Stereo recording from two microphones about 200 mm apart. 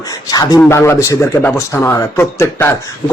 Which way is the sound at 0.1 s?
20° left (ahead or behind).